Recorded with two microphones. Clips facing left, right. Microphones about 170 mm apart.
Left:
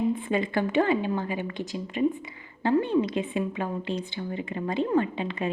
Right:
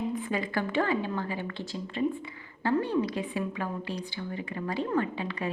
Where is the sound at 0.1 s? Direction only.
25° left (ahead or behind).